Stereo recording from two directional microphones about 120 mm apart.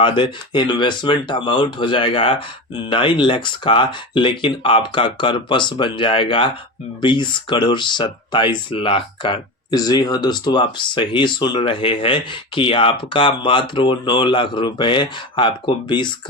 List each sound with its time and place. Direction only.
0.0 s speech: 40° left (ahead or behind)